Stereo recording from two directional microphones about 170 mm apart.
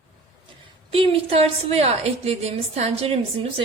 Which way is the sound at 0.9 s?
30° right (ahead or behind).